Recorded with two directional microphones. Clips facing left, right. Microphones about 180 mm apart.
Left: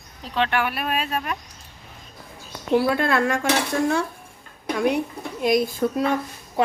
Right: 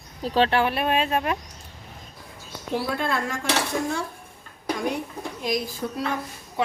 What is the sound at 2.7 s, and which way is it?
Speech, 65° left (ahead or behind).